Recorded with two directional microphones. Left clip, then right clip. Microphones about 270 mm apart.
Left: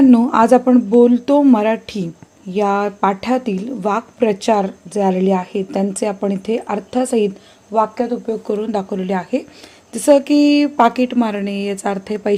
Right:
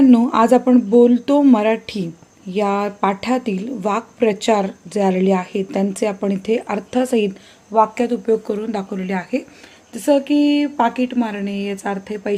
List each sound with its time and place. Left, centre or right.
0.0 s a woman's voice: centre
8.5 s speech: centre